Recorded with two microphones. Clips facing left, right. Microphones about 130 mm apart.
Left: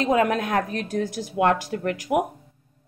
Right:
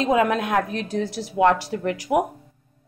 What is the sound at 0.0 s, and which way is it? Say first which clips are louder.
Speech: right 1 dB; 30° right (ahead or behind).